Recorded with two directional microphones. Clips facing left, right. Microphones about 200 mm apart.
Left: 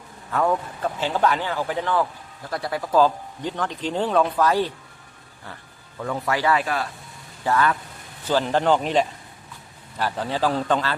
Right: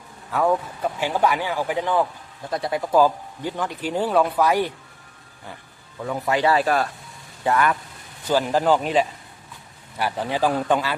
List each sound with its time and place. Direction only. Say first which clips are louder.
0.3 s speech: right 1 dB; 5° right (ahead or behind)
6.2 s speech: right 3 dB; 20° right (ahead or behind)
6.5 s speech: right 4 dB; 40° right (ahead or behind)
7.4 s speech: right 1 dB; 15° right (ahead or behind)
10.0 s speech: right 1 dB; 15° right (ahead or behind)